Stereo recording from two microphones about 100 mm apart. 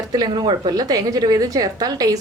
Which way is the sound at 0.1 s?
40° right (ahead or behind).